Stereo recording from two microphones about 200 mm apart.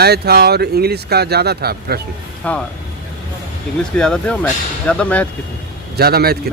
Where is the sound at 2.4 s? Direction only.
5° left (ahead or behind).